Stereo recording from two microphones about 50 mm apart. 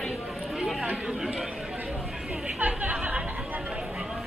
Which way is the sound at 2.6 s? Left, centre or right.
Right.